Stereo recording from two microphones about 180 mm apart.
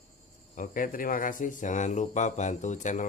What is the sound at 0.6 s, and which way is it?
Speech, 50° left (ahead or behind).